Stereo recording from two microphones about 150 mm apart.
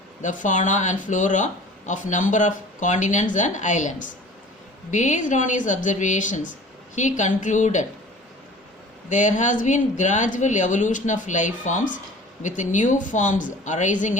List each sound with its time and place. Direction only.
0.2 s a woman's voice: 55° left (ahead or behind)
9.0 s a woman's voice: 55° left (ahead or behind)